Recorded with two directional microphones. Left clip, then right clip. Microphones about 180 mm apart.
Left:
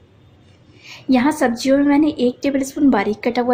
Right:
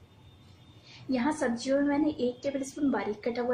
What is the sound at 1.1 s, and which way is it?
A woman's voice, 60° left (ahead or behind).